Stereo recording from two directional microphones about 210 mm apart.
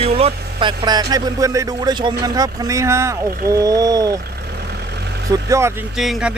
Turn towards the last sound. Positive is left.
turn(degrees=-5)  # may be behind; listen again after turning